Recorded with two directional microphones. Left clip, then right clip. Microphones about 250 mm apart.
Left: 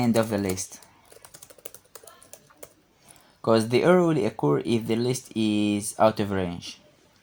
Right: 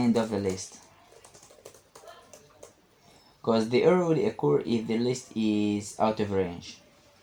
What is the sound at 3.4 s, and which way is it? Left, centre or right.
Speech, left.